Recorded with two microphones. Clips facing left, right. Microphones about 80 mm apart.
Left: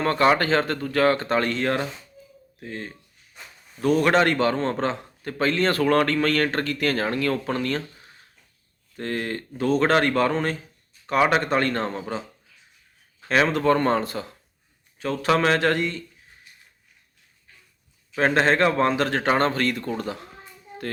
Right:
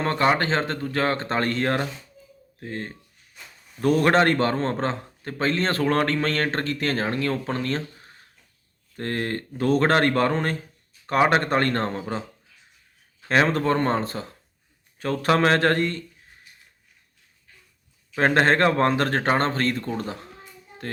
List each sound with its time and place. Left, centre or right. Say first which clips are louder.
0.0 s a man's voice: left 2 dB; right
13.2 s a man's voice: left 1 dB; right
14.9 s a man's voice: even; right
18.2 s a man's voice: right 1 dB; right